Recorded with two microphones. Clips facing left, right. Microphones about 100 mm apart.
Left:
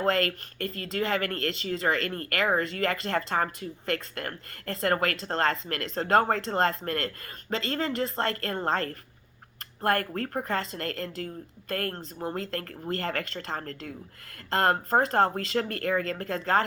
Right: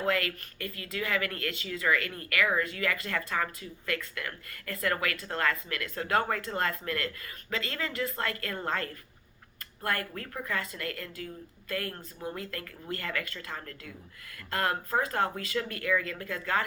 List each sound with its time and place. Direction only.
0.0 s speech: 55° left (ahead or behind)
6.1 s speech: 45° left (ahead or behind); by 16.6 s 60° left (ahead or behind)